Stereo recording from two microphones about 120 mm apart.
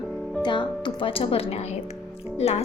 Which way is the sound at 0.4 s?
40° left (ahead or behind).